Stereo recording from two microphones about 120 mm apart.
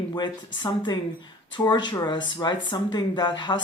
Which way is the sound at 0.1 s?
40° left (ahead or behind).